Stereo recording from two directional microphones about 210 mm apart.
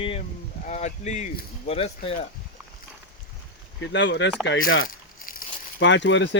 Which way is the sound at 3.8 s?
55° left (ahead or behind).